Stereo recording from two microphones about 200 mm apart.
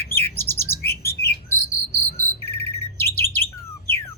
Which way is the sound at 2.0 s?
35° left (ahead or behind).